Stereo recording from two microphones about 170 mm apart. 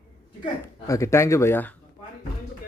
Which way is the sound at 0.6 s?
15° left (ahead or behind).